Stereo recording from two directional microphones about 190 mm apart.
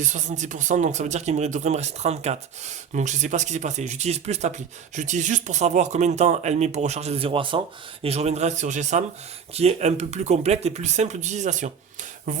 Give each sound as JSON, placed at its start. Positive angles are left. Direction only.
{"t": 0.0, "sound": "speech", "side_deg": -40}